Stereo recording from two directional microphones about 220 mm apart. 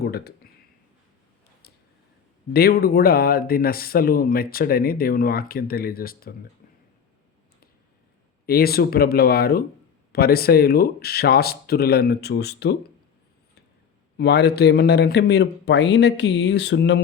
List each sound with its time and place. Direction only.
0.0 s a sound: 45° left (ahead or behind)
2.5 s speech: 45° left (ahead or behind)
8.4 s speech: 45° left (ahead or behind)
14.2 s speech: 50° left (ahead or behind)